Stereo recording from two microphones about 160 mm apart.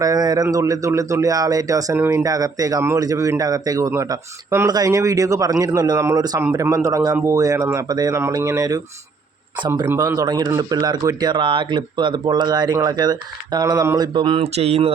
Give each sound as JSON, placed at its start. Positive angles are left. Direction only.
{"t": 0.0, "sound": "speech", "side_deg": -25}